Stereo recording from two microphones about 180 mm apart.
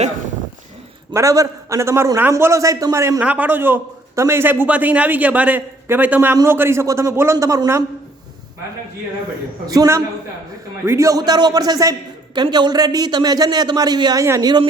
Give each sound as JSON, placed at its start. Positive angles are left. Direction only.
{"t": 1.1, "sound": "a man's voice", "side_deg": -15}
{"t": 9.6, "sound": "a man's voice", "side_deg": -20}